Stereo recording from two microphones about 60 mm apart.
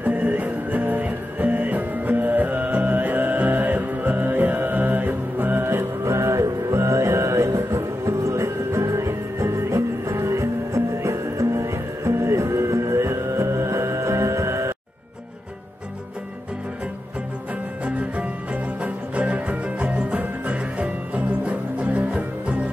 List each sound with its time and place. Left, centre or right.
0.0 s music: right
5.7 s music: right
17.8 s music: right